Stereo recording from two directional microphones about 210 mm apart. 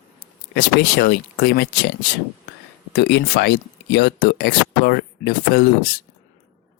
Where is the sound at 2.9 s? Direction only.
55° left (ahead or behind).